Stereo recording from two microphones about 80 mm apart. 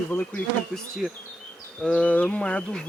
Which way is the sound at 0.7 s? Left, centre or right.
Centre.